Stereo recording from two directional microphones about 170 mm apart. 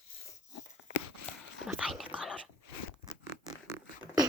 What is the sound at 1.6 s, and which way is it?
Dog, centre (ahead or behind).